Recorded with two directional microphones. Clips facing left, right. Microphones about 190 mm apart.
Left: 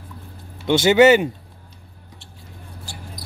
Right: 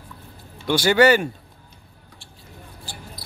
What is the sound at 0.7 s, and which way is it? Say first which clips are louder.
Speech: left 4 dB; 20° left (ahead or behind).